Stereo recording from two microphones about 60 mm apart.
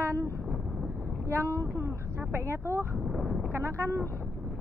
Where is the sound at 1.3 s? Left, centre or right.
Right.